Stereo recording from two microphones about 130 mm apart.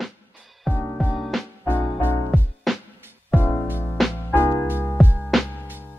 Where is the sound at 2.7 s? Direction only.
Centre (ahead or behind).